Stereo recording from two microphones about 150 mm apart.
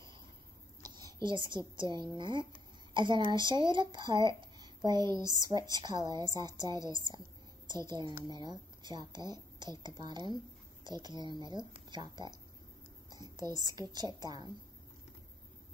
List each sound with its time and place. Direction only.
0.8 s a sound: 30° right (ahead or behind)
1.8 s a woman's voice: 30° right (ahead or behind)
13.7 s speech: 25° right (ahead or behind)